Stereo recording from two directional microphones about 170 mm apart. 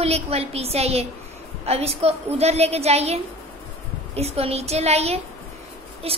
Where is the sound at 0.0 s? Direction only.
35° right (ahead or behind).